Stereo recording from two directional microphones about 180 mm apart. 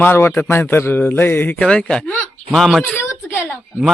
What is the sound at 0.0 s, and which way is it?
A man's voice, 10° left (ahead or behind).